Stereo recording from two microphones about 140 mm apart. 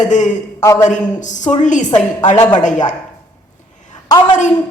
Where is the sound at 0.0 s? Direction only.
60° left (ahead or behind).